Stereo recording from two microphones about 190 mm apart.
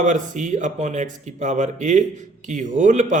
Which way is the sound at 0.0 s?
40° right (ahead or behind).